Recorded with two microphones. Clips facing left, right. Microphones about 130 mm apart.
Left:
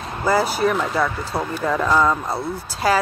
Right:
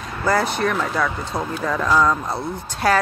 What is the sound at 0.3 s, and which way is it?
Speech, 5° left (ahead or behind).